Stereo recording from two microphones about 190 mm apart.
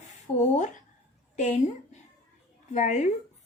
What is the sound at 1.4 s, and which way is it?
A woman's voice, 40° left (ahead or behind).